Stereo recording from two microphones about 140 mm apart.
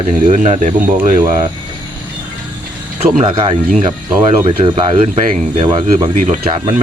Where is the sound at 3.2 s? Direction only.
35° right (ahead or behind).